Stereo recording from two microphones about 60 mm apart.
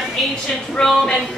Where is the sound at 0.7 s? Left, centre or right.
Centre.